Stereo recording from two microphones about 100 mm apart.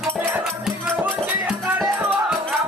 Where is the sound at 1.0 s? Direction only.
15° right (ahead or behind).